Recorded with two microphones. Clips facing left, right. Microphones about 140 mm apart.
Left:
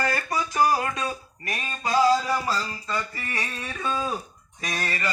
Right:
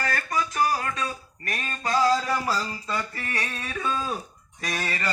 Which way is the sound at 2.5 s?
5° right (ahead or behind).